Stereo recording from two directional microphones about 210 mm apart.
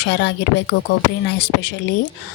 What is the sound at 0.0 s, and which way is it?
Speech, 55° left (ahead or behind).